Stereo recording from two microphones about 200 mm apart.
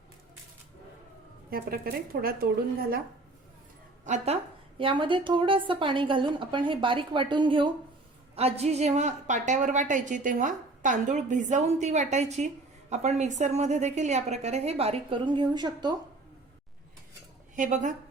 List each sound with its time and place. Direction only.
1.5 s a woman's voice: 50° right (ahead or behind)
4.0 s a woman's voice: 35° right (ahead or behind)
4.8 s a woman's voice: 25° right (ahead or behind)
17.5 s a woman's voice: 40° right (ahead or behind)